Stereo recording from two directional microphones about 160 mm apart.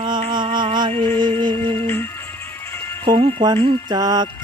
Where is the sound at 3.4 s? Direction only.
30° right (ahead or behind).